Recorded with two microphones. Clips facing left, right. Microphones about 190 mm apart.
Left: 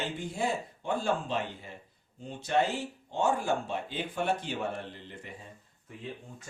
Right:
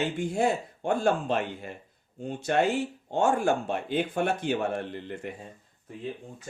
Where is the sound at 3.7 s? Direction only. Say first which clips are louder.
Right 7 dB; 55° right (ahead or behind).